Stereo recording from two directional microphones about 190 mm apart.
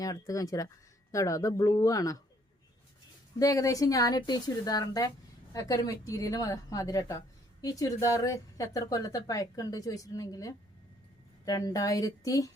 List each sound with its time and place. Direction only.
0.0 s a woman's voice: 20° left (ahead or behind)
3.3 s a woman's voice: 20° left (ahead or behind)